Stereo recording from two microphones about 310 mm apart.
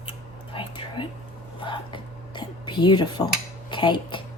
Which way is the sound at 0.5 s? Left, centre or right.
Centre.